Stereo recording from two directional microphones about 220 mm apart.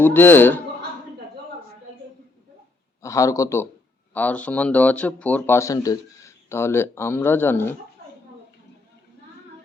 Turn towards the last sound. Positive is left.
turn(degrees=10)  # may be behind; listen again after turning